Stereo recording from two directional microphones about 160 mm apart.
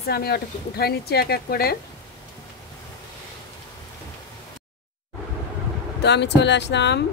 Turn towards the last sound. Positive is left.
turn(degrees=90)